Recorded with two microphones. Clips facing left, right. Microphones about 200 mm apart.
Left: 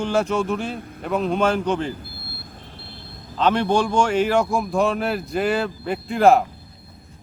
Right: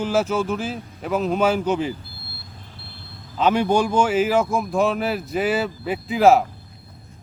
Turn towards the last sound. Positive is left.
turn(degrees=0)  # may be behind; listen again after turning